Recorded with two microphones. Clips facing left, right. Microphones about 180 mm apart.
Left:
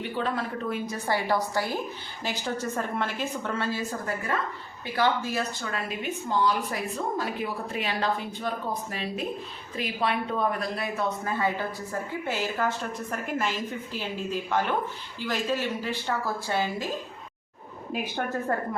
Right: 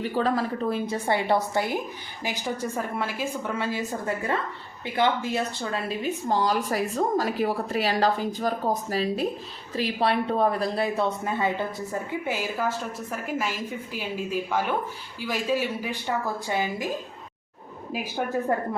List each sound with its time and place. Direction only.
0.1 s a woman's voice: 40° right (ahead or behind); by 16.9 s 15° right (ahead or behind)
17.9 s a woman's voice: 5° right (ahead or behind)